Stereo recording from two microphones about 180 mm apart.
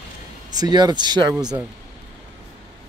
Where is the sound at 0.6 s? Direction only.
25° right (ahead or behind).